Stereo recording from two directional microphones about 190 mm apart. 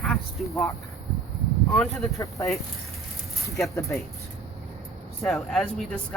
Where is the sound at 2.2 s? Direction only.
15° left (ahead or behind).